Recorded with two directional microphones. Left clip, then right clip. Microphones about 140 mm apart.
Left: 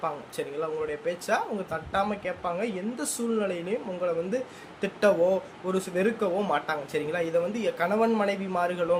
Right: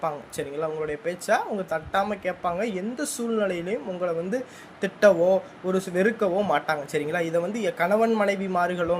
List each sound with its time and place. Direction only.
0.0 s speech: 35° right (ahead or behind)